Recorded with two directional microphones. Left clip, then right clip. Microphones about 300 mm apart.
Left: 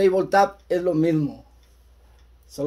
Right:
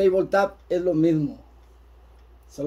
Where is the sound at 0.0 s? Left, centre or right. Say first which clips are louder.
Left 2 dB; left.